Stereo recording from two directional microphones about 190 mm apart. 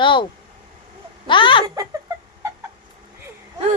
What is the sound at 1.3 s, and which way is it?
Speech, 25° left (ahead or behind).